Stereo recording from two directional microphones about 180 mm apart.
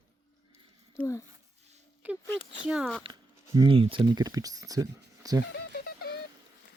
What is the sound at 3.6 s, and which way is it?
Speech, 30° right (ahead or behind).